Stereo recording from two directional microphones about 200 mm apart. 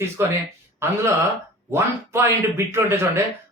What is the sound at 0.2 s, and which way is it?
Speech, 10° right (ahead or behind).